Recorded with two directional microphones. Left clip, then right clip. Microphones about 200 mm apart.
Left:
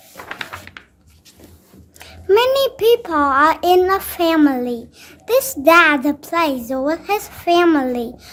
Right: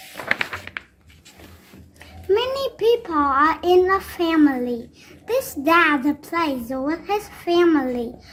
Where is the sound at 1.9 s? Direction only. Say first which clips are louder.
Left 6 dB; 40° left (ahead or behind).